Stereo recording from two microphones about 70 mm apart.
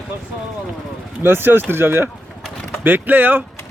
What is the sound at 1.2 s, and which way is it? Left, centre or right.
Speech, right.